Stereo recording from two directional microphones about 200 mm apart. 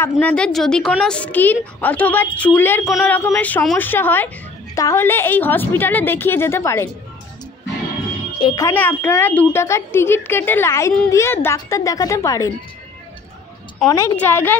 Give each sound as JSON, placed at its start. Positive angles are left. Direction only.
{"t": 0.0, "sound": "speech", "side_deg": 5}
{"t": 8.4, "sound": "speech", "side_deg": 20}
{"t": 13.8, "sound": "speech", "side_deg": 15}